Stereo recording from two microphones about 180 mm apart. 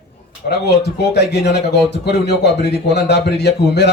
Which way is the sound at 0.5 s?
70° left (ahead or behind).